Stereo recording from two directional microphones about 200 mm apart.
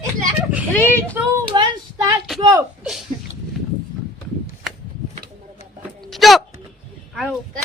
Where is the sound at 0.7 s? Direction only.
10° left (ahead or behind).